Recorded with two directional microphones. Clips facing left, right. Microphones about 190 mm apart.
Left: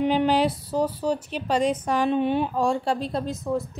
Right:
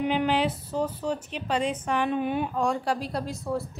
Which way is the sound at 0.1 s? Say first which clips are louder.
Left 4 dB; 35° left (ahead or behind).